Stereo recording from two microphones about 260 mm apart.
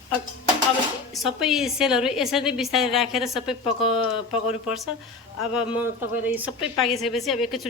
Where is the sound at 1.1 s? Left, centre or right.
Centre.